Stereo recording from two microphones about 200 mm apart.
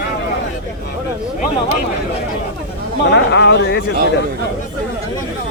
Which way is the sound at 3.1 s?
60° left (ahead or behind).